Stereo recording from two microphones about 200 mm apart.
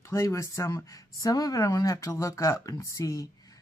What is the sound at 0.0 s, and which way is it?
Speech, 15° left (ahead or behind).